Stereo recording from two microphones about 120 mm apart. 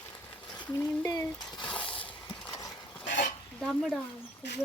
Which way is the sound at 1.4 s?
35° left (ahead or behind).